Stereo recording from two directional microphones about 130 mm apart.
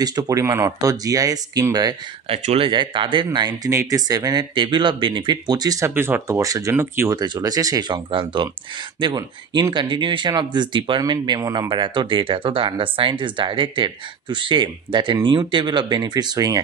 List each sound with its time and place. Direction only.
0.0 s speech: 30° right (ahead or behind)
2.2 s speech: 50° right (ahead or behind); by 5.9 s 30° right (ahead or behind)
5.9 s speech: 15° right (ahead or behind)
7.2 s speech: 30° right (ahead or behind)
8.1 s speech: 40° right (ahead or behind)